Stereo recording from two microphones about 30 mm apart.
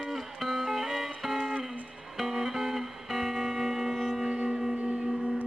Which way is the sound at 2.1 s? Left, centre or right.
Centre.